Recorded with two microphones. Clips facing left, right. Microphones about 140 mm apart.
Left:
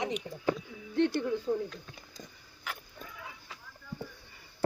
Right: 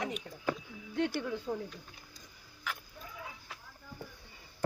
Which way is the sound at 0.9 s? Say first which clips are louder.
Left 5 dB; 10° right (ahead or behind).